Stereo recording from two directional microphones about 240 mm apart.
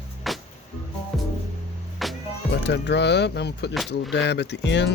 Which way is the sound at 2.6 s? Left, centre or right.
Left.